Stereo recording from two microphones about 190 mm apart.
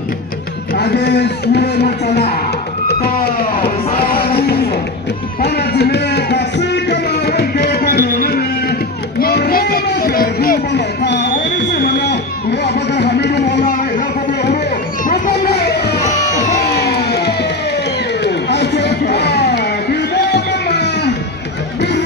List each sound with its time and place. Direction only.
0.7 s music: 60° left (ahead or behind)
3.9 s music: 30° left (ahead or behind)
4.2 s music: 55° left (ahead or behind)
9.2 s a sound: 55° left (ahead or behind)
12.6 s music: 60° left (ahead or behind)
13.6 s chatter: 45° left (ahead or behind)
15.0 s a sound: 50° left (ahead or behind)
16.6 s music: 60° left (ahead or behind)